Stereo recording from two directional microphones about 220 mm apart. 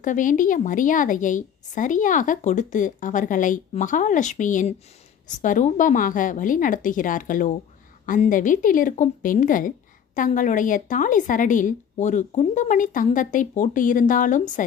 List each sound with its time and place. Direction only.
0.0 s a woman's voice: 35° left (ahead or behind)